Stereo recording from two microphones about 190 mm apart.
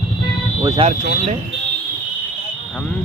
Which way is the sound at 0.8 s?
30° right (ahead or behind).